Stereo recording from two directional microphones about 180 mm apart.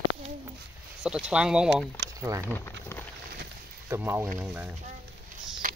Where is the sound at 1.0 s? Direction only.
5° right (ahead or behind).